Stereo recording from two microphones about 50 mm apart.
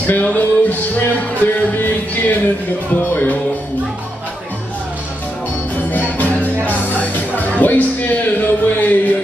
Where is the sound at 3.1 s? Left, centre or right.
Left.